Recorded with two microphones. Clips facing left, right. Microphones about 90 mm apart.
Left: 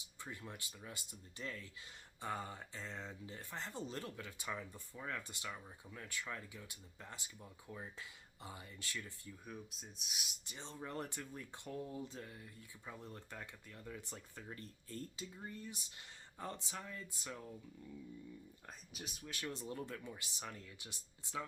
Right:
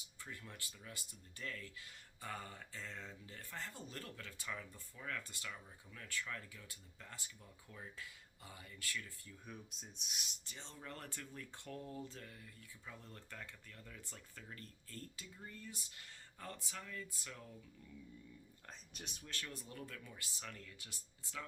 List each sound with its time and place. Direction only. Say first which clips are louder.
0.2 s speech: left 3 dB; 20° left (ahead or behind)
9.5 s speech: left 2 dB; centre (ahead or behind)
10.4 s speech: left 4 dB; 20° left (ahead or behind)
18.9 s speech: left 4 dB; 5° left (ahead or behind)
19.3 s speech: left 6 dB; 20° left (ahead or behind)